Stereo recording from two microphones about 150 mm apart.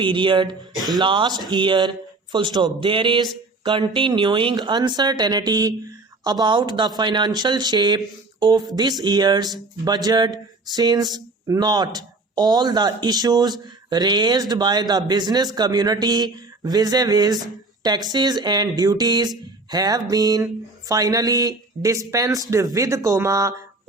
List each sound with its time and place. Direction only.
0.0 s speech: 35° right (ahead or behind)